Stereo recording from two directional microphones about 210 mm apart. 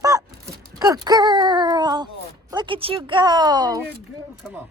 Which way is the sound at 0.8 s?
20° right (ahead or behind).